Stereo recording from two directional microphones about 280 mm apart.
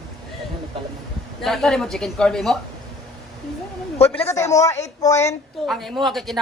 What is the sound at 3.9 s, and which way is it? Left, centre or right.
A man's voice, left.